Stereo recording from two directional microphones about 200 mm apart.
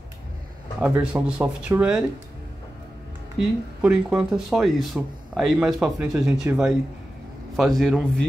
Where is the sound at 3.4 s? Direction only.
5° right (ahead or behind).